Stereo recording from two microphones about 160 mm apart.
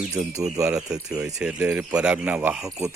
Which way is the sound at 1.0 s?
5° right (ahead or behind).